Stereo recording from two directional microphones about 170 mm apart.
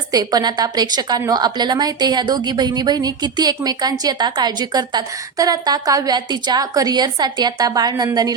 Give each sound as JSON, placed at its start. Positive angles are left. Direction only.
{"t": 0.1, "sound": "a woman's voice", "side_deg": -20}